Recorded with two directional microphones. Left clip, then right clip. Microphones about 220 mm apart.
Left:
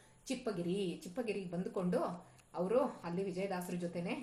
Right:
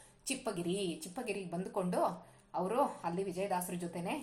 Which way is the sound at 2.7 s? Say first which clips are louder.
Even; 20° right (ahead or behind).